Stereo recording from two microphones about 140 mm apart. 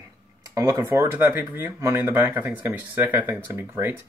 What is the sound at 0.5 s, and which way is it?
Speech, 25° right (ahead or behind).